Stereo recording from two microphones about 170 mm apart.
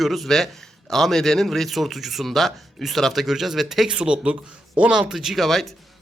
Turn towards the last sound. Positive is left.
turn(degrees=0)  # may be behind; listen again after turning